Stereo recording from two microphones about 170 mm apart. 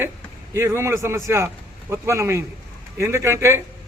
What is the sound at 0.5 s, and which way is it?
A man's voice, 15° right (ahead or behind).